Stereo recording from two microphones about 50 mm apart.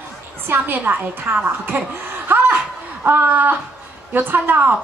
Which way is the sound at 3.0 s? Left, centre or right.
Right.